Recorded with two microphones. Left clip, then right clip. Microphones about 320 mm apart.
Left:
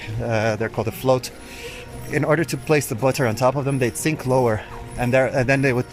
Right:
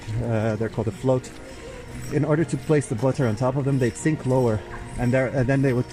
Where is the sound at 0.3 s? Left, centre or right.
Left.